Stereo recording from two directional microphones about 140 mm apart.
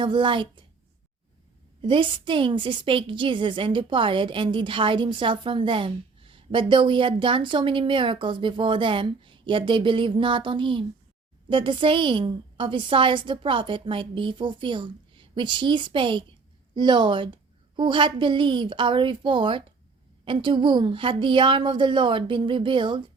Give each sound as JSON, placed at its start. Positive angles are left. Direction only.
{"t": 0.0, "sound": "a woman's voice", "side_deg": -35}
{"t": 1.8, "sound": "a woman's voice", "side_deg": -40}